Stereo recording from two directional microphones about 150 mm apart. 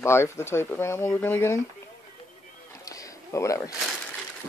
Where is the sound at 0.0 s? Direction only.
15° left (ahead or behind).